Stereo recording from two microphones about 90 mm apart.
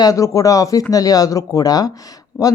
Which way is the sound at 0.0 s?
40° left (ahead or behind).